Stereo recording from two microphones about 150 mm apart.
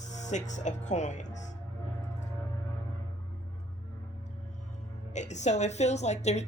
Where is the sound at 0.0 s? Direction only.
50° left (ahead or behind).